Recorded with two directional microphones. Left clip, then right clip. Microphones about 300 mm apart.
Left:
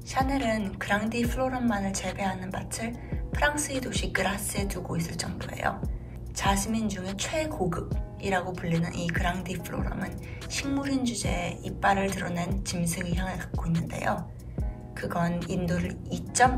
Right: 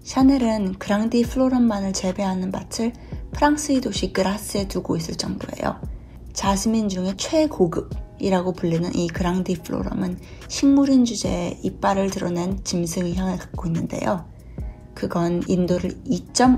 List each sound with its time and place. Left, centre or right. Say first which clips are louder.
0.1 s a woman's voice: right 8 dB; centre